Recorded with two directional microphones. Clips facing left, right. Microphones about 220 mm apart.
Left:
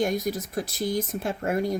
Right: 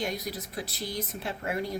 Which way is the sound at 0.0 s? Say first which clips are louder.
Left 8 dB; 50° left (ahead or behind).